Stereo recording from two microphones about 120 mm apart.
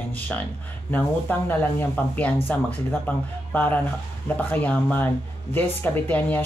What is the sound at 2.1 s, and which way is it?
Speech, 15° left (ahead or behind).